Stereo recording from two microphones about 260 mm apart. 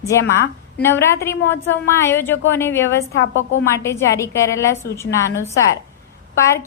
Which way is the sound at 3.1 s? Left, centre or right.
Left.